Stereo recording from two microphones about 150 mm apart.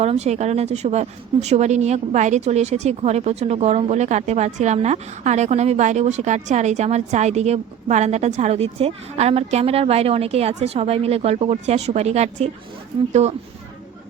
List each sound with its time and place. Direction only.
0.0 s speech: 45° right (ahead or behind)